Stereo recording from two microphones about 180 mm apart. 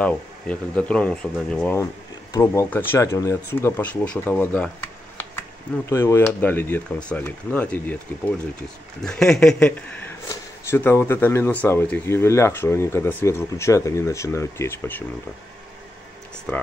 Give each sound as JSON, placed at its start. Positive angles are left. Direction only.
{"t": 0.0, "sound": "speech", "side_deg": 5}
{"t": 5.9, "sound": "speech", "side_deg": 15}
{"t": 9.0, "sound": "speech", "side_deg": 5}
{"t": 16.5, "sound": "speech", "side_deg": 10}